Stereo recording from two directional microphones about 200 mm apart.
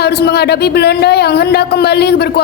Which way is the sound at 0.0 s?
55° left (ahead or behind).